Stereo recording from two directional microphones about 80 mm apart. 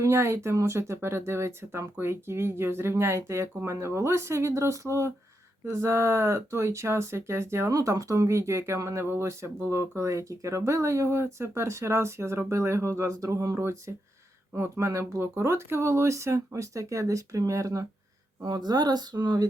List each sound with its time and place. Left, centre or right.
0.0 s speech: right
7.7 s speech: right
18.4 s speech: right